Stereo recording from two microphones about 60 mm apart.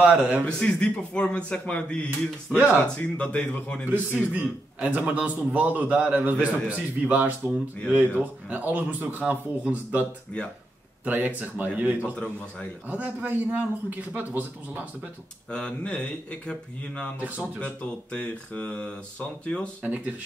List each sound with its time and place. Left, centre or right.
0.0 s speech: right
0.5 s speech: centre
2.5 s speech: right
3.0 s speech: left
3.9 s speech: right
11.1 s speech: right
15.5 s speech: centre
19.8 s speech: right